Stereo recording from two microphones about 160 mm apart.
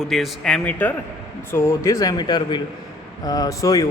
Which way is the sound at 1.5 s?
15° left (ahead or behind).